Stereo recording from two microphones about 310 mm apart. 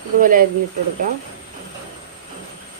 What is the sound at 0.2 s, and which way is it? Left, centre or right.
Speech, right.